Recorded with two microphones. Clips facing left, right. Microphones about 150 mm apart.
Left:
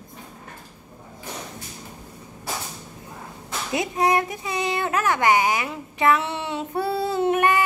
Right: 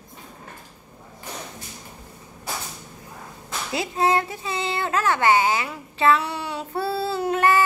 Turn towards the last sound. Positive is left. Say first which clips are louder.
# even
turn(degrees=15)  # may be behind; listen again after turning